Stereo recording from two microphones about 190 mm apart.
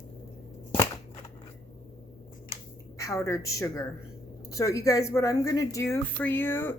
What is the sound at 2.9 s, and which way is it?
A woman's voice, 15° left (ahead or behind).